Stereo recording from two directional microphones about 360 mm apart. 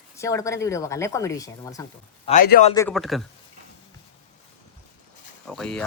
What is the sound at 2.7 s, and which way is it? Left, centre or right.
Speech, centre.